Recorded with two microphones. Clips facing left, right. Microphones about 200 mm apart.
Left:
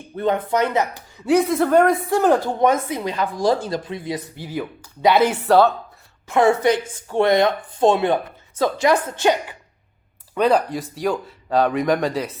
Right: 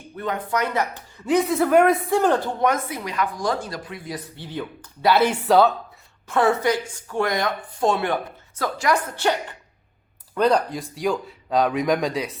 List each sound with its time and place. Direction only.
0.2 s speech: 25° left (ahead or behind)
0.9 s speech: 10° left (ahead or behind)
2.6 s speech: 25° left (ahead or behind)
4.4 s speech: 10° left (ahead or behind)
5.3 s speech: centre (ahead or behind)
6.2 s speech: 15° left (ahead or behind)
10.3 s speech: centre (ahead or behind)